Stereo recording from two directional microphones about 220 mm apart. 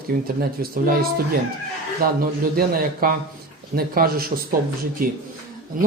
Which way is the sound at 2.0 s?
45° right (ahead or behind).